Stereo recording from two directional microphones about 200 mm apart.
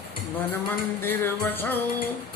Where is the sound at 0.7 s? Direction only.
10° left (ahead or behind).